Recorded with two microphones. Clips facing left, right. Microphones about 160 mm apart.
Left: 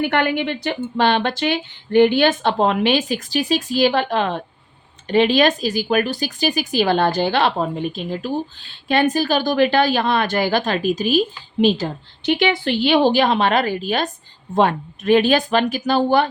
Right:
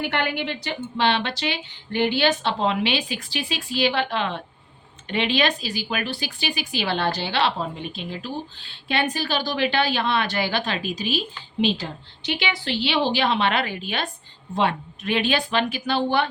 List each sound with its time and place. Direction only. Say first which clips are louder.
0.0 s speech: left 6 dB; 50° left (ahead or behind)